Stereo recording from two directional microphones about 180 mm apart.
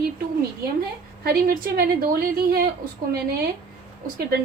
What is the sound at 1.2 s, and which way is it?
A woman's voice, 55° right (ahead or behind).